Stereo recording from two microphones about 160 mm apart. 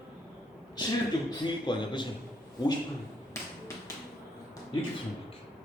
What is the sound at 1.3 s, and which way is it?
Speech, 30° left (ahead or behind).